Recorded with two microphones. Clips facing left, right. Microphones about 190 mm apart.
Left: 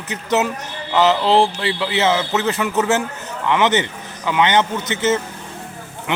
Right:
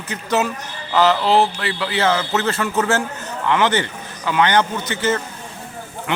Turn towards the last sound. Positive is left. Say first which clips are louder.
# even
turn(degrees=20)  # may be behind; listen again after turning